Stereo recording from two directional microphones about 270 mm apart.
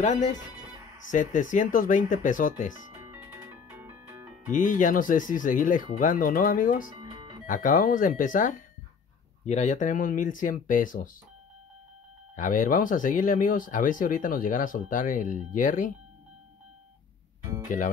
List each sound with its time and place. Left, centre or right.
0.0 s speech: left
2.9 s music: centre
4.5 s speech: left
12.4 s speech: left
17.6 s speech: left